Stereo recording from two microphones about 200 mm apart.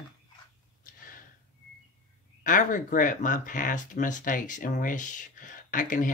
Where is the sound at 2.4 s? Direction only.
40° left (ahead or behind).